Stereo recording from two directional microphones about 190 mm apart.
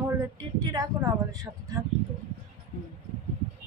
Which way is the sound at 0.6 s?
20° right (ahead or behind).